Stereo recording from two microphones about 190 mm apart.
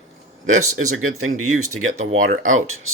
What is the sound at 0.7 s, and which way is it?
Speech, 90° right.